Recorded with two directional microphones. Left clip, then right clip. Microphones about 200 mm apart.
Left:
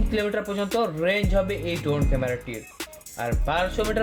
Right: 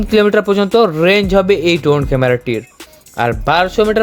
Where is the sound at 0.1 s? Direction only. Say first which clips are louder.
Right 15 dB; 50° right (ahead or behind).